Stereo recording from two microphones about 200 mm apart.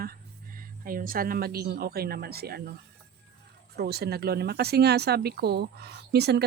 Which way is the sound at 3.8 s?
55° right (ahead or behind).